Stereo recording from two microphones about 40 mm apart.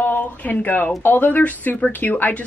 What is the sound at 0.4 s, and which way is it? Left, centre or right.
Speech, left.